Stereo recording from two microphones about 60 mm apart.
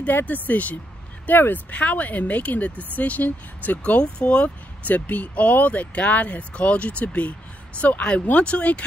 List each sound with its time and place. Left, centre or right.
0.0 s speech: left